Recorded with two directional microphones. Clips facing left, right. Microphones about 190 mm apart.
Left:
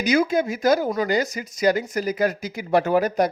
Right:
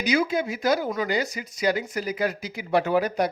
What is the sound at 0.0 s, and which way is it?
Speech, 45° left (ahead or behind).